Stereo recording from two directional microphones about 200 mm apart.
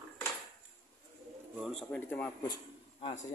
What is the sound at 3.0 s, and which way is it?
Speech, 35° left (ahead or behind).